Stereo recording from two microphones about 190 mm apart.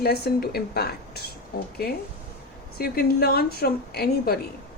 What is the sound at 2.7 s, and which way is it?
A woman's voice, 55° left (ahead or behind).